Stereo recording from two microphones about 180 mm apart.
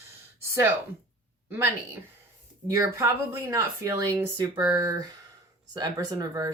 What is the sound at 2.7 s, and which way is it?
Speech, 15° right (ahead or behind).